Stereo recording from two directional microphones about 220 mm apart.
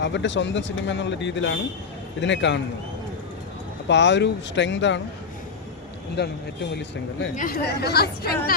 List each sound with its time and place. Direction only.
0.0 s a man's voice: 55° left (ahead or behind)
3.8 s speech: 55° left (ahead or behind)
6.2 s speech: 50° left (ahead or behind)
7.3 s speech: 40° left (ahead or behind)